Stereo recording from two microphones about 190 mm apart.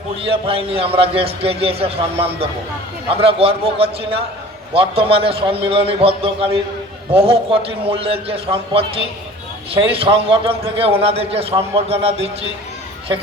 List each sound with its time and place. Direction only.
0.3 s a man's voice: 30° right (ahead or behind)